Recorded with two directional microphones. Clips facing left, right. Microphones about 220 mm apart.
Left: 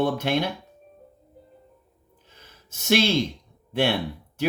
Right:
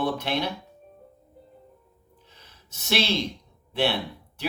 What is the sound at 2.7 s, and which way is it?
Speech, 50° left (ahead or behind).